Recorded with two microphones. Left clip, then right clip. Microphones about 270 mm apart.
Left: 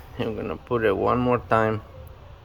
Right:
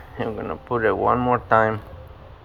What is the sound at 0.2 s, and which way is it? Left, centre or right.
Speech, centre.